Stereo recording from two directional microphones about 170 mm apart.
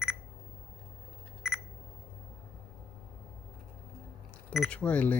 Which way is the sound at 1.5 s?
5° right (ahead or behind).